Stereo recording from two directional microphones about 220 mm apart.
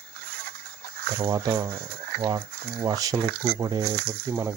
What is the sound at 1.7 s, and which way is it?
Speech, 45° right (ahead or behind).